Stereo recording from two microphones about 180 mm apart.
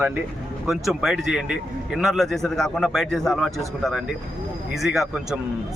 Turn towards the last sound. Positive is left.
turn(degrees=-5)  # may be behind; listen again after turning